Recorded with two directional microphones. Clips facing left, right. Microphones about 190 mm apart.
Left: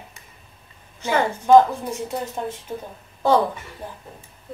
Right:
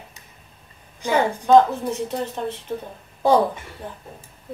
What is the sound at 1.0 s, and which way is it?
Speech, 15° right (ahead or behind).